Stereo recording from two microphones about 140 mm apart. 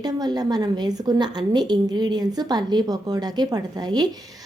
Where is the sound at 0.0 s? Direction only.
30° right (ahead or behind).